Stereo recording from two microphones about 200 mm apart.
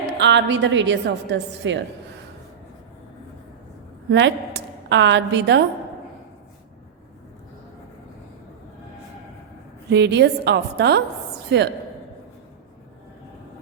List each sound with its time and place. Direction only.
0.2 s a woman's voice: 60° right (ahead or behind)
4.1 s a woman's voice: 65° right (ahead or behind)
9.9 s a woman's voice: 60° right (ahead or behind)